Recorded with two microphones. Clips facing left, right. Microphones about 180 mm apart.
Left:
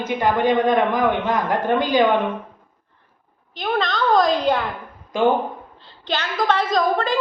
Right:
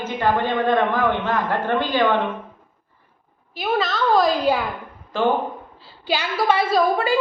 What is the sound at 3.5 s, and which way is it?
A woman's voice, 5° right (ahead or behind).